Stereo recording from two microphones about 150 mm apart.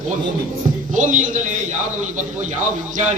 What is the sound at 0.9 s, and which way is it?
A man's voice, 60° right (ahead or behind).